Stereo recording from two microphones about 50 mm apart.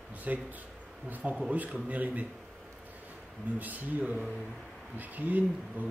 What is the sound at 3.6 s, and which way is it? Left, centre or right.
Speech, right.